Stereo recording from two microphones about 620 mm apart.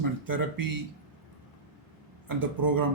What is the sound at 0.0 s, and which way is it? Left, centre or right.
Speech, right.